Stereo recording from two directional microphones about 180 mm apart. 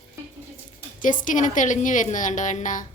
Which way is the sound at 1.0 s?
45° left (ahead or behind).